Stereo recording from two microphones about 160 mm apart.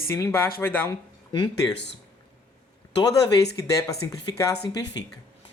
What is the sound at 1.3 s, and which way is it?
Speech, 30° left (ahead or behind).